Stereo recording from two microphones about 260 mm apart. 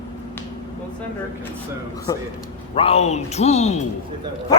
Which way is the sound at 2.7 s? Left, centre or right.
Left.